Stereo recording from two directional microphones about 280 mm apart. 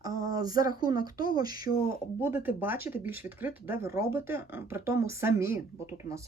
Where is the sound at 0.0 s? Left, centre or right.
Centre.